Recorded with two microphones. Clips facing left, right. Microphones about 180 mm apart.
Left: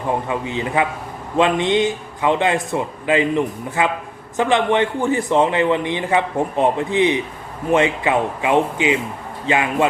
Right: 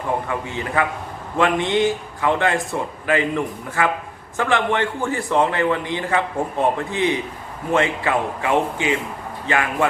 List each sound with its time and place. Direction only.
0.3 s a man's voice: 20° left (ahead or behind)